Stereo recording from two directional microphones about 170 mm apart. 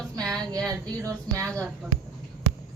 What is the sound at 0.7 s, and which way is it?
Speech, 20° right (ahead or behind).